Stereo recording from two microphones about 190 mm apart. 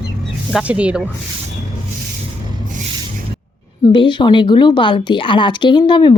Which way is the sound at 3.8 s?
25° left (ahead or behind).